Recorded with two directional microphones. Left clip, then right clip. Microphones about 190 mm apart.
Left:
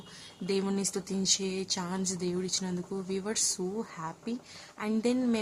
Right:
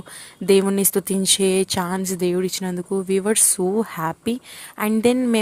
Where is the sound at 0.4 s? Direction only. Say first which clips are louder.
Right 14 dB; 35° right (ahead or behind).